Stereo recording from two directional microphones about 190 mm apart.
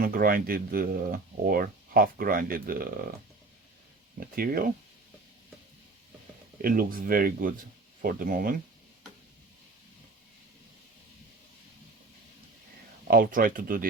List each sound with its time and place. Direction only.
0.0 s speech: 50° right (ahead or behind)
4.2 s speech: 50° right (ahead or behind)
6.6 s speech: 50° right (ahead or behind)
13.1 s speech: 50° right (ahead or behind)